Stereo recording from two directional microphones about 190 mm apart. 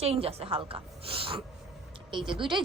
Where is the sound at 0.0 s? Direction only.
30° right (ahead or behind).